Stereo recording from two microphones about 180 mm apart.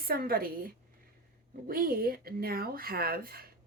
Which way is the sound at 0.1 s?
55° right (ahead or behind).